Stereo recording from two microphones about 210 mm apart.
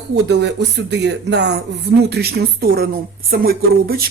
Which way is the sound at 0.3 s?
55° right (ahead or behind).